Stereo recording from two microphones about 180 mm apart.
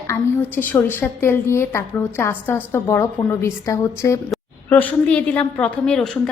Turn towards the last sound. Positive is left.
turn(degrees=5)  # may be behind; listen again after turning